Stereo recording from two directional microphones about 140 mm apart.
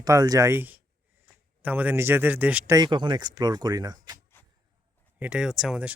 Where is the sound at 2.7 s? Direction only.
30° right (ahead or behind).